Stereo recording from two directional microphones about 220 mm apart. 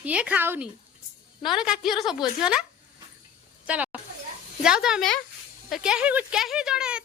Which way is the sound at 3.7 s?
5° right (ahead or behind).